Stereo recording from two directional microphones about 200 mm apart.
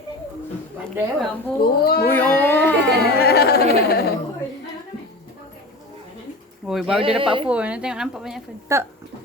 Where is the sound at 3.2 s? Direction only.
50° left (ahead or behind).